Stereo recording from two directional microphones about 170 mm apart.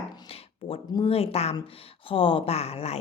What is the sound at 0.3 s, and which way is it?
A woman's voice, 35° left (ahead or behind).